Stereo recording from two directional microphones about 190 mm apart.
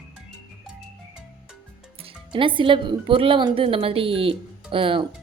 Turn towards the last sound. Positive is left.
turn(degrees=-25)  # may be behind; listen again after turning